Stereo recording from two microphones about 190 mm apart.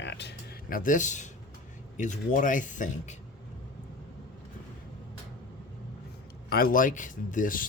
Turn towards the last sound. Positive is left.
turn(degrees=45)  # may be behind; listen again after turning